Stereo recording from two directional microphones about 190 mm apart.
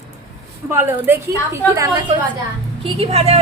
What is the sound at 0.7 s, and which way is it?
A woman's voice, 15° right (ahead or behind).